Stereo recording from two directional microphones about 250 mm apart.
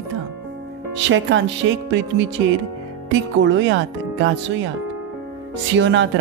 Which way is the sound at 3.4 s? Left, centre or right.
Right.